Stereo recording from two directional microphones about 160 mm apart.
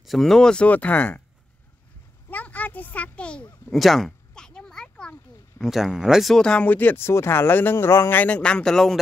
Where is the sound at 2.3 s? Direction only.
10° left (ahead or behind).